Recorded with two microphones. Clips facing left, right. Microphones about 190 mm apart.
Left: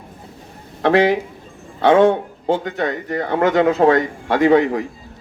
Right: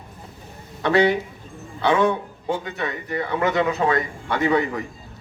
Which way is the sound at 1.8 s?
50° left (ahead or behind).